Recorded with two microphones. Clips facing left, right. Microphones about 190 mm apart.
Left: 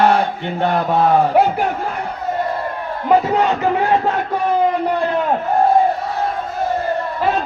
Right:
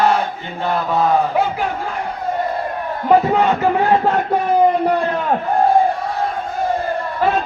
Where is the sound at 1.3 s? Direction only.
65° left (ahead or behind).